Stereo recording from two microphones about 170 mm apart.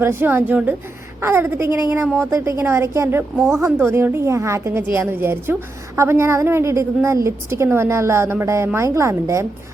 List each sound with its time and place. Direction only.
0.0 s a woman's voice: 10° right (ahead or behind)
3.3 s speech: centre (ahead or behind)
3.6 s a woman's voice: 15° right (ahead or behind)